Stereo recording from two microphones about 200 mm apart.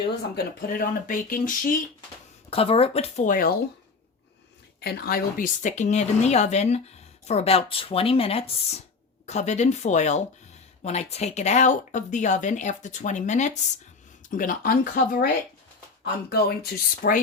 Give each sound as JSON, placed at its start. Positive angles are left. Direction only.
{"t": 0.3, "sound": "speech", "side_deg": 45}
{"t": 2.5, "sound": "speech", "side_deg": 30}
{"t": 4.8, "sound": "speech", "side_deg": 50}
{"t": 16.3, "sound": "speech", "side_deg": 50}